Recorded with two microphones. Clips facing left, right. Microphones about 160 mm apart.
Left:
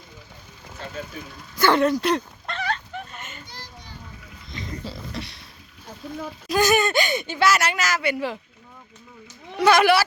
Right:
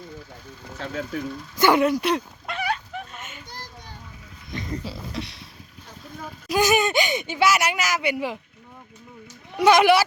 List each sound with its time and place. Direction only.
0.8 s speech: 80° right
1.5 s a sound: 15° right (ahead or behind)
3.5 s children playing: 50° right (ahead or behind)
4.9 s beatboxing: centre (ahead or behind)
6.5 s speech: 15° right (ahead or behind)
9.6 s speech: 15° right (ahead or behind)